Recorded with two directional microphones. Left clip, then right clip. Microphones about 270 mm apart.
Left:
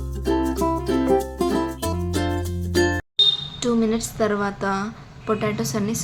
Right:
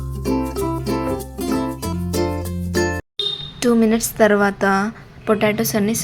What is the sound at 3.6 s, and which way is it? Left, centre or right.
A woman's voice, right.